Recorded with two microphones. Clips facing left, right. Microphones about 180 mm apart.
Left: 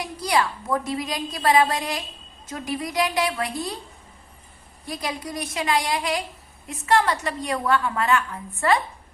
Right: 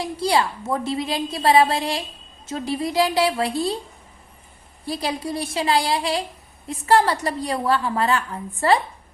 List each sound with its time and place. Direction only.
0.0 s a woman's voice: 30° right (ahead or behind)
4.9 s a woman's voice: 30° right (ahead or behind)